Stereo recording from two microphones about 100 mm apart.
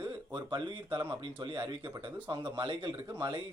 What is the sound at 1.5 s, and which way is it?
Speech, 25° right (ahead or behind).